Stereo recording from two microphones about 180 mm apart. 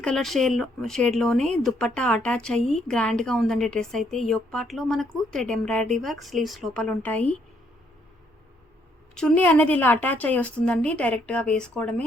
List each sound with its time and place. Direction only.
0.0 s speech: centre (ahead or behind)
9.1 s a woman's voice: 5° left (ahead or behind)